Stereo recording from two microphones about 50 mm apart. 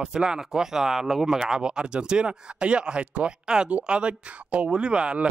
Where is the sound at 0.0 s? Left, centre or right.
Centre.